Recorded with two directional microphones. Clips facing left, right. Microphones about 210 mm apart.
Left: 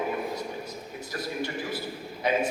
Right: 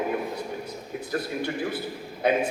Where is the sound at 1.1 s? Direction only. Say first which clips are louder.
Right 3 dB; 55° right (ahead or behind).